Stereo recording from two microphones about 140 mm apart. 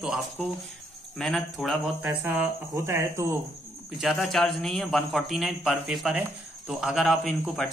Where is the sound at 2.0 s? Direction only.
20° right (ahead or behind).